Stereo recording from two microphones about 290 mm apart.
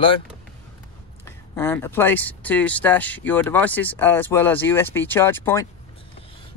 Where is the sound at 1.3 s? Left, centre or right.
Centre.